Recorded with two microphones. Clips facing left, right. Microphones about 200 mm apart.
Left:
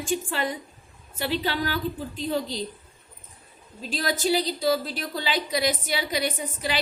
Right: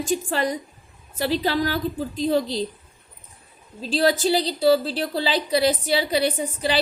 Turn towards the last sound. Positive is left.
turn(degrees=-35)  # may be behind; listen again after turning